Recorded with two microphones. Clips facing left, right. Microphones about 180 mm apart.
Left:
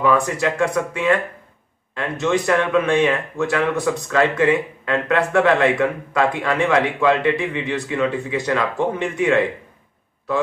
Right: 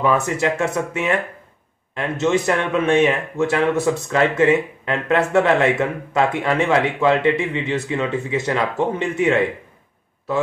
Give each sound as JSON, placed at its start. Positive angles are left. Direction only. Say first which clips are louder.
{"t": 0.0, "sound": "speech", "louder": "even", "side_deg": -25}